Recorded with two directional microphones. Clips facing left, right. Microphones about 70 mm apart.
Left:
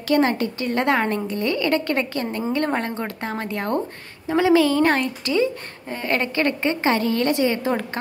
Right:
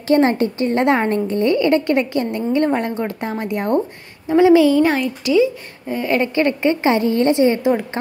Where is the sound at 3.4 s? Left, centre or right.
Right.